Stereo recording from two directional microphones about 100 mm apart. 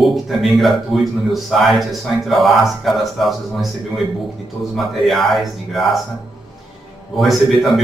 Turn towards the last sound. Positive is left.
turn(degrees=0)  # may be behind; listen again after turning